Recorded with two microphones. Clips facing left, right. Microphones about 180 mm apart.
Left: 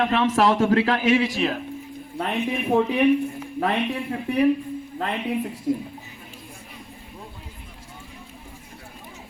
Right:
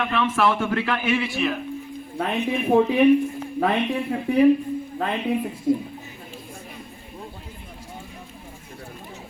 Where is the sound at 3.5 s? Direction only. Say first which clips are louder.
Right 2 dB; 20° right (ahead or behind).